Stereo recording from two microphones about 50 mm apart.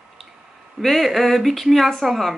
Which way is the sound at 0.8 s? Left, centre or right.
Centre.